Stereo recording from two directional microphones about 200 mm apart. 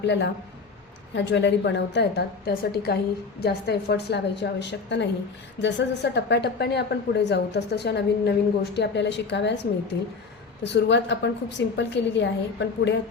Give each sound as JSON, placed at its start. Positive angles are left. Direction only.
{"t": 0.0, "sound": "a woman's voice", "side_deg": 60}
{"t": 10.6, "sound": "a woman's voice", "side_deg": 60}